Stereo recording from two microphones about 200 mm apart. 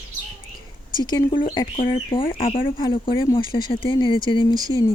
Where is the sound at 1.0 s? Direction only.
20° left (ahead or behind).